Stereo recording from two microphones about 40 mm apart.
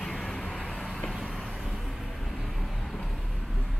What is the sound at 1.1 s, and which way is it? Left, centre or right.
Vehicle, centre.